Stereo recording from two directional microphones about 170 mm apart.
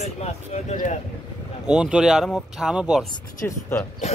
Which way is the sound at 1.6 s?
5° right (ahead or behind).